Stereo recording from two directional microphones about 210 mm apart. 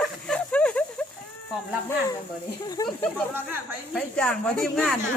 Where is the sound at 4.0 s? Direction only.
5° left (ahead or behind).